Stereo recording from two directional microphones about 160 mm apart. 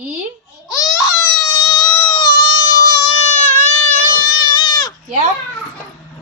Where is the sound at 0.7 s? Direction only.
20° left (ahead or behind).